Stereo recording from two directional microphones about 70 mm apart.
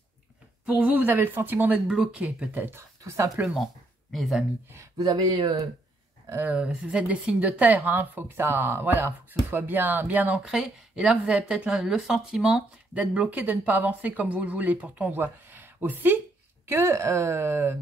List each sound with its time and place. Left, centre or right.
0.7 s speech: right
1.9 s a woman's voice: centre
2.5 s speech: right
3.0 s speech: right
4.1 s speech: centre
4.9 s speech: right
6.4 s a woman's voice: centre
10.5 s a woman's voice: centre
12.9 s speech: centre; by 17.7 s right